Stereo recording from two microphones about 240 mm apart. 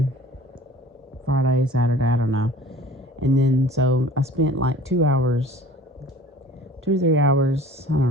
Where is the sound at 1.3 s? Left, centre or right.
Right.